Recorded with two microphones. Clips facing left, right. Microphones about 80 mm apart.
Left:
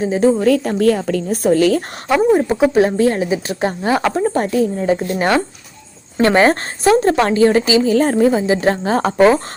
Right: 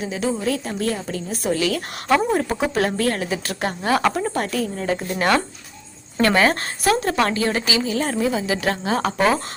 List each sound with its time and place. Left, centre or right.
0.0 s a woman's voice: left
0.3 s a woman's voice: left
2.0 s a woman's voice: centre